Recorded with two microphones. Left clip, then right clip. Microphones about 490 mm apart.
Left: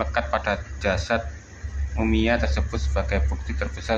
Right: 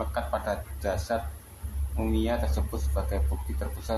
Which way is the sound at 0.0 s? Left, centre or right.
Right.